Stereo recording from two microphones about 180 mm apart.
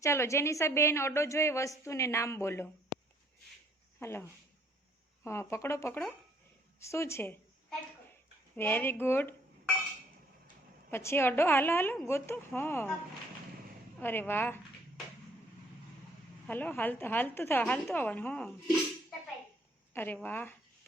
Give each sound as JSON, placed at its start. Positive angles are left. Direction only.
{"t": 0.0, "sound": "a woman's voice", "side_deg": 15}
{"t": 4.0, "sound": "a woman's voice", "side_deg": 15}
{"t": 8.5, "sound": "a woman's voice", "side_deg": 10}
{"t": 10.9, "sound": "a woman's voice", "side_deg": 15}
{"t": 14.0, "sound": "a woman's voice", "side_deg": 10}
{"t": 16.5, "sound": "a woman's voice", "side_deg": 10}
{"t": 19.9, "sound": "a woman's voice", "side_deg": 10}